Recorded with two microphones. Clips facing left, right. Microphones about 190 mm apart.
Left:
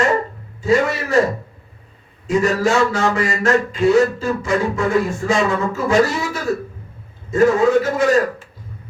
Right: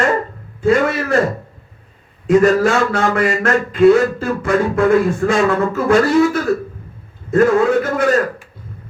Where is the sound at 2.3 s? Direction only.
55° right (ahead or behind).